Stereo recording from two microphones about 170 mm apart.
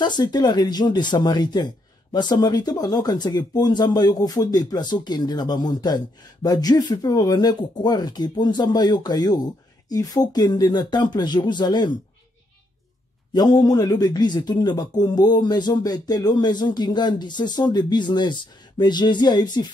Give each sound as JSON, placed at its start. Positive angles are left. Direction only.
{"t": 0.0, "sound": "speech", "side_deg": 25}
{"t": 13.3, "sound": "speech", "side_deg": 25}